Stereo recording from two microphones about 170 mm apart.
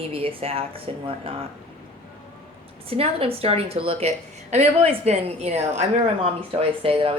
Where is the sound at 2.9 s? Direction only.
35° right (ahead or behind).